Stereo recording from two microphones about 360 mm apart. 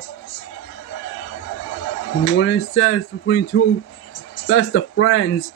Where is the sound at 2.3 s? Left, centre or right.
Left.